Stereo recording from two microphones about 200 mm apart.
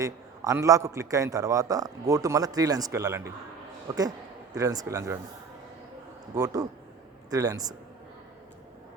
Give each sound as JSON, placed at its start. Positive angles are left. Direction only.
{"t": 0.0, "sound": "a man's voice", "side_deg": -15}
{"t": 6.3, "sound": "a man's voice", "side_deg": -15}